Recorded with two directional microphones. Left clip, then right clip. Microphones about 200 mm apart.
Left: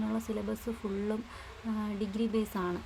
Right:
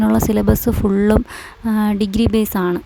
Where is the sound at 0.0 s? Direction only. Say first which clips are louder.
Right 19 dB; 55° right (ahead or behind).